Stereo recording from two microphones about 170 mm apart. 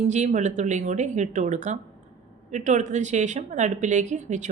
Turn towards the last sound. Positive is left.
turn(degrees=-45)  # may be behind; listen again after turning